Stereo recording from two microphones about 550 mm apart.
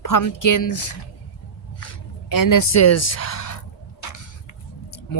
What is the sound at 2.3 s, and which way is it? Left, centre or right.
Speech, left.